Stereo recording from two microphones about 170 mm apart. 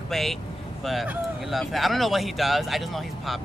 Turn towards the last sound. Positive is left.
turn(degrees=0)  # may be behind; listen again after turning